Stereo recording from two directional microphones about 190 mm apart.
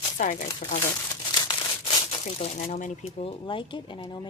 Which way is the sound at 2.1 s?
35° left (ahead or behind).